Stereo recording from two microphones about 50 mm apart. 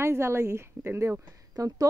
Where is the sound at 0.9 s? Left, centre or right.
Right.